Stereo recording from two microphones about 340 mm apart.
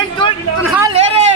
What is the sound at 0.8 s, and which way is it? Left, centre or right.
Speech, centre.